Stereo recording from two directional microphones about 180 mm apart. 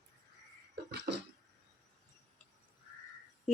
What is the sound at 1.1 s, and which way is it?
Cough, 60° right (ahead or behind).